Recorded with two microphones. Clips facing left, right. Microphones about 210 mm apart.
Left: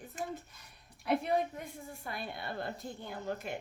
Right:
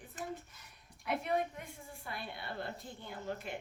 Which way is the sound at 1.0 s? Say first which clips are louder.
Left 4 dB; 35° left (ahead or behind).